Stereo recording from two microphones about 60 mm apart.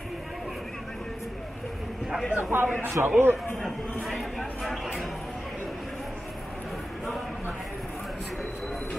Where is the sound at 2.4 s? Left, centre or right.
Right.